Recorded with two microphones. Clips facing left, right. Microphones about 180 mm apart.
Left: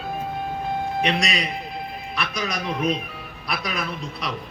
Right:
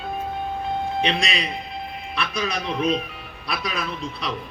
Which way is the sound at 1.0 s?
30° right (ahead or behind).